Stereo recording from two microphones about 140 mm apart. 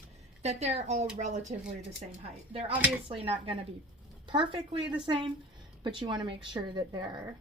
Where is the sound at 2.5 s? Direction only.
40° right (ahead or behind).